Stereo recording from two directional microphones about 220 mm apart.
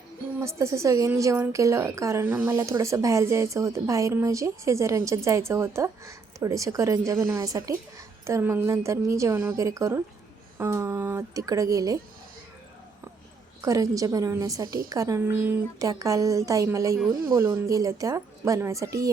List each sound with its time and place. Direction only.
0.4 s speech: 15° right (ahead or behind)
13.6 s speech: 15° right (ahead or behind)